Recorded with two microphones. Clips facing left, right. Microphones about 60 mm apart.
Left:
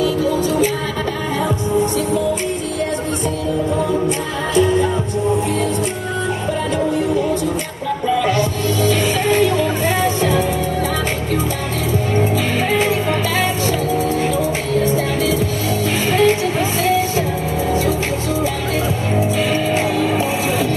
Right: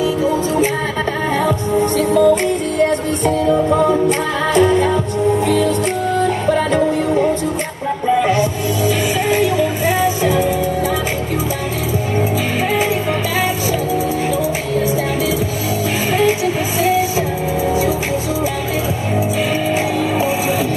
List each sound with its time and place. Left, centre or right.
0.0 s music: right
2.0 s music: right
4.6 s music: right
8.1 s music: right
13.4 s music: centre
16.1 s music: centre
17.6 s vehicle: centre